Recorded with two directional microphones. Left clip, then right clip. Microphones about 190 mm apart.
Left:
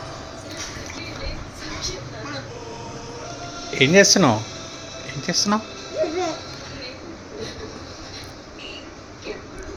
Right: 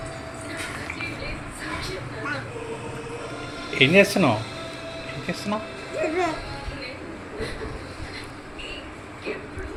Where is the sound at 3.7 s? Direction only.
15° left (ahead or behind); by 5.6 s 30° left (ahead or behind).